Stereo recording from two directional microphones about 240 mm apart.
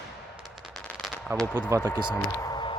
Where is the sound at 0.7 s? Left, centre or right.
Centre.